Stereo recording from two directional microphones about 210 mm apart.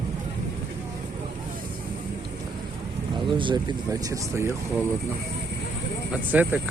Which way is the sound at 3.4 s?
20° right (ahead or behind).